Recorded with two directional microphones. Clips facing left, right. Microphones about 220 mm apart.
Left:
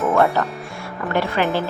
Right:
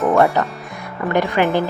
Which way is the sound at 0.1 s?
15° right (ahead or behind).